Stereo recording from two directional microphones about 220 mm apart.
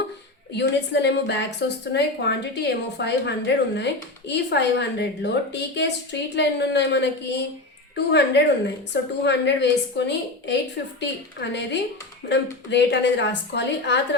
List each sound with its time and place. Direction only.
0.5 s a woman's voice: 50° left (ahead or behind)